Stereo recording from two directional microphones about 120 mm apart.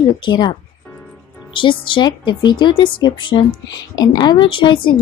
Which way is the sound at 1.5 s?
45° left (ahead or behind).